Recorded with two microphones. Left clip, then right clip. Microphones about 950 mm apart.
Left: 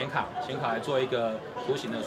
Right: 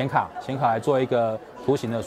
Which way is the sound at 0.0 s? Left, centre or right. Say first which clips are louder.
Right 6 dB; right.